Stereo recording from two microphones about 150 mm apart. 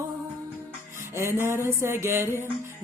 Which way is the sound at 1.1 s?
15° right (ahead or behind).